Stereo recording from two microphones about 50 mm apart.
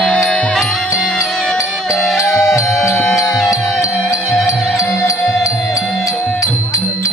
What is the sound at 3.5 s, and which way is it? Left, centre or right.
Music, left.